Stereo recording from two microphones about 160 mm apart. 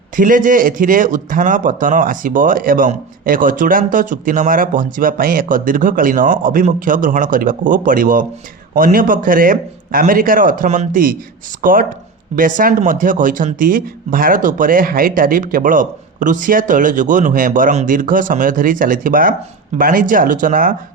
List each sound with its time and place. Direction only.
0.2 s speech: 55° right (ahead or behind)